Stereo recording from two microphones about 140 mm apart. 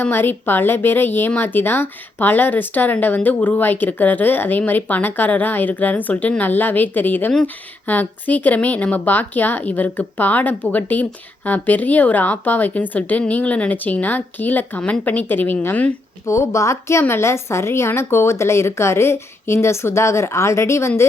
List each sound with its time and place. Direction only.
0.0 s a woman's voice: 15° left (ahead or behind)